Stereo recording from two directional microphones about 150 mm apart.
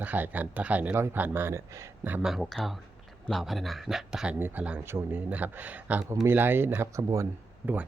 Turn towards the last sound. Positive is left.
turn(degrees=-15)  # may be behind; listen again after turning